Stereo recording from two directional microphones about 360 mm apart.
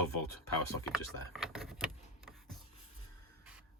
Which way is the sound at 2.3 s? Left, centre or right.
Centre.